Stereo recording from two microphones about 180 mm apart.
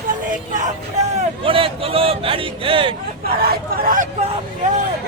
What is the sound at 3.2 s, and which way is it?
Speech, 55° right (ahead or behind).